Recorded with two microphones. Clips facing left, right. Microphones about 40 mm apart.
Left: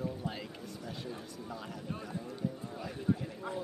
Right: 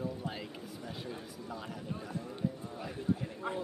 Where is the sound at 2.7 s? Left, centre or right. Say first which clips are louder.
Left 1 dB; centre.